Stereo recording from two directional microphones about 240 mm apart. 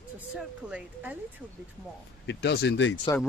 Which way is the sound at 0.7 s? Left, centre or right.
Centre.